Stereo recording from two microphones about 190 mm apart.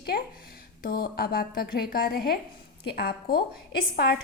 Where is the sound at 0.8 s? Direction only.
50° left (ahead or behind).